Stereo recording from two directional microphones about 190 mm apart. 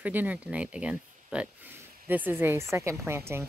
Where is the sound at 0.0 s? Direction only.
10° right (ahead or behind).